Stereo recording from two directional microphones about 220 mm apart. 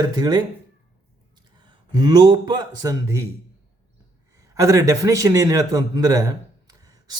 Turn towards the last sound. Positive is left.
turn(degrees=-15)  # may be behind; listen again after turning